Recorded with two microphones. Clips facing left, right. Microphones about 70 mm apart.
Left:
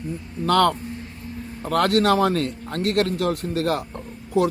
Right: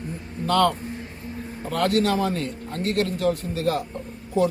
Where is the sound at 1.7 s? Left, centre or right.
Left.